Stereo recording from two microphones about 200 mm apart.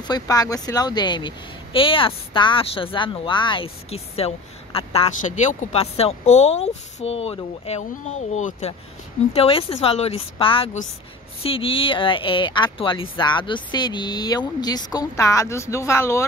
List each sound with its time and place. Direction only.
0.0 s speech: 20° left (ahead or behind)